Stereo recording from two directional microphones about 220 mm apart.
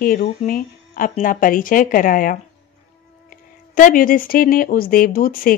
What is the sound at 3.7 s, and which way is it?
Speech, 40° left (ahead or behind).